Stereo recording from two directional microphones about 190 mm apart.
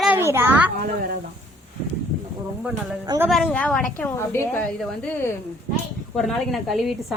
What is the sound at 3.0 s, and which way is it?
Speech, 20° right (ahead or behind).